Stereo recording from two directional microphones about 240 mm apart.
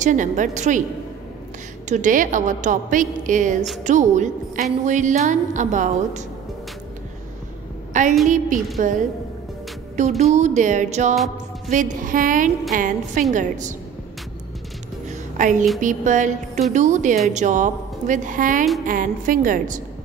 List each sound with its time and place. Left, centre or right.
0.0 s a woman's voice: right
1.9 s a woman's voice: right
7.9 s a woman's voice: right
10.3 s music: right
11.7 s a woman's voice: right
15.0 s music: right
15.8 s a woman's voice: right